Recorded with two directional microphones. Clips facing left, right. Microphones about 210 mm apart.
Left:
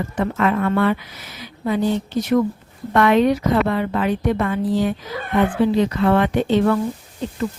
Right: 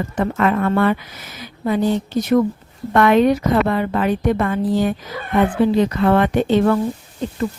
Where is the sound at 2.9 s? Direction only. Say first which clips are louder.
Right 2 dB; 45° right (ahead or behind).